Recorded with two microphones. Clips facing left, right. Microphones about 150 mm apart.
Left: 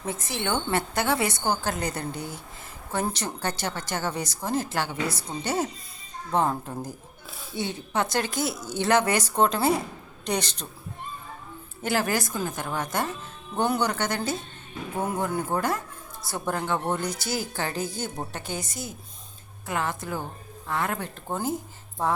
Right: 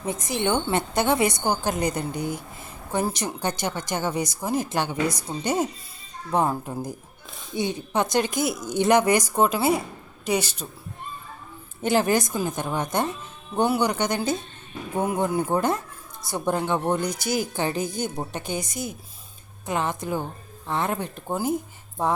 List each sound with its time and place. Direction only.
0.0 s speech: 15° right (ahead or behind)
11.8 s a woman's voice: 20° right (ahead or behind)
21.2 s speech: 10° right (ahead or behind)